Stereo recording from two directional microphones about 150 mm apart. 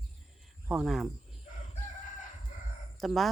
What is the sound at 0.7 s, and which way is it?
Speech, centre (ahead or behind).